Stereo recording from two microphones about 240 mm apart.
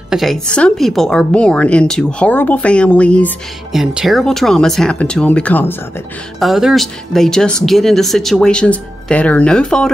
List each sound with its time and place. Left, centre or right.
0.1 s speech: centre